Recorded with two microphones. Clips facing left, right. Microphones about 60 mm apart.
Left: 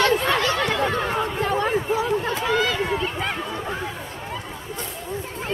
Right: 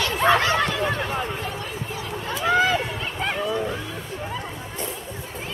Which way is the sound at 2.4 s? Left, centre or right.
Right.